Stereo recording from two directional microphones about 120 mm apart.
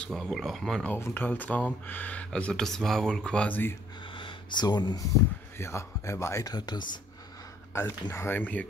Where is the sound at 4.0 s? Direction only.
45° left (ahead or behind).